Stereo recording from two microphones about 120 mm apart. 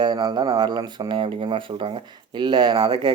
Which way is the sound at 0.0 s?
40° right (ahead or behind).